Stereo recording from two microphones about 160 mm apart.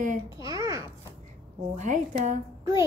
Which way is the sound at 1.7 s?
50° right (ahead or behind).